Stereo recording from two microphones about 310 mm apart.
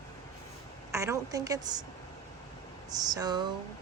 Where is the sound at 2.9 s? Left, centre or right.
Centre.